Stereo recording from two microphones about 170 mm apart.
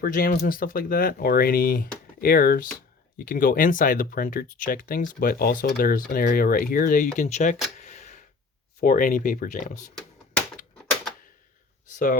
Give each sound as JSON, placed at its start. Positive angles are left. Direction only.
{"t": 0.0, "sound": "speech", "side_deg": 55}
{"t": 7.8, "sound": "a sound", "side_deg": 45}
{"t": 8.8, "sound": "speech", "side_deg": 55}